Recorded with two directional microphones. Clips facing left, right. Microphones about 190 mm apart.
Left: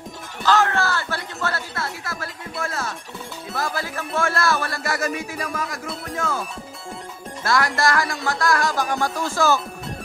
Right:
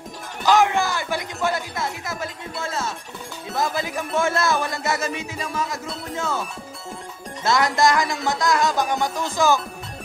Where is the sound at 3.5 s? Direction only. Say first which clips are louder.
Right 3 dB; 20° right (ahead or behind).